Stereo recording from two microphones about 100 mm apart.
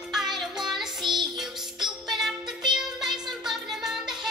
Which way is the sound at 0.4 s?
5° right (ahead or behind).